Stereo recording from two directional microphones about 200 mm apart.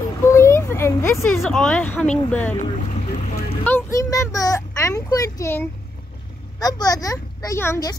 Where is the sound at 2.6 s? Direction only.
35° left (ahead or behind).